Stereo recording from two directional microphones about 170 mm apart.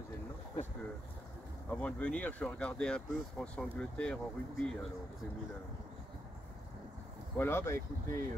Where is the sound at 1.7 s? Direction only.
5° left (ahead or behind).